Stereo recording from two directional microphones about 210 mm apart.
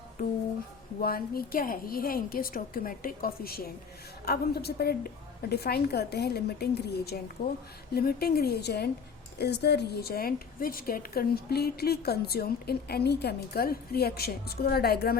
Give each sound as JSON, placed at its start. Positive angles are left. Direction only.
{"t": 1.0, "sound": "a woman's voice", "side_deg": 45}